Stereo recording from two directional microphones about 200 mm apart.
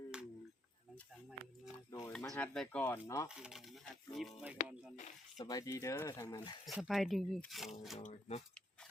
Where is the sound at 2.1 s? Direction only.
10° left (ahead or behind).